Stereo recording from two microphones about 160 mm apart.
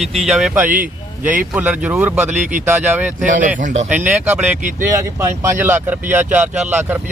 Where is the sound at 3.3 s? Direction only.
55° right (ahead or behind).